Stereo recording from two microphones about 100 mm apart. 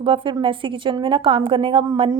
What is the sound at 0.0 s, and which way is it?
A woman's voice, 60° right (ahead or behind).